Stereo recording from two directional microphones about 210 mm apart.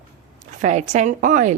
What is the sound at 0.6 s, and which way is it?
Speech, 35° right (ahead or behind).